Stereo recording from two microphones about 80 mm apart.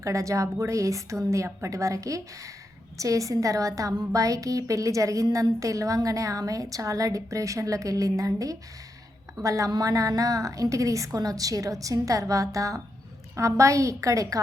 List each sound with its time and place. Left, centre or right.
0.0 s a woman's voice: right